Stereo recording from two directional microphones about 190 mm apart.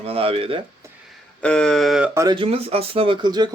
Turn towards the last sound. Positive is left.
turn(degrees=-25)  # may be behind; listen again after turning